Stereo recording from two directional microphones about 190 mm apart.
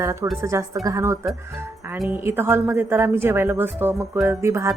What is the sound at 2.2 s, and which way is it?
A woman's voice, 10° right (ahead or behind).